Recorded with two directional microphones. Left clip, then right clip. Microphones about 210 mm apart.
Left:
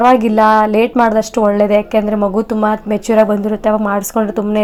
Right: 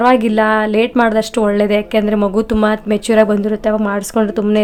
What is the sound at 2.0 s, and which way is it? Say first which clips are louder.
Speech: even; 20° right (ahead or behind).